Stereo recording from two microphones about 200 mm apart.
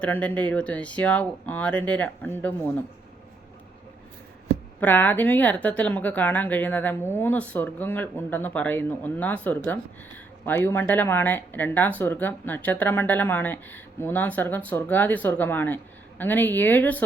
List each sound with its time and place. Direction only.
0.0 s speech: 5° left (ahead or behind)
4.8 s speech: 10° left (ahead or behind)